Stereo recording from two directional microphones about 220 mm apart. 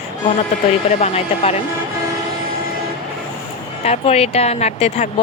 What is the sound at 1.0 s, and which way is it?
Speech, 30° left (ahead or behind).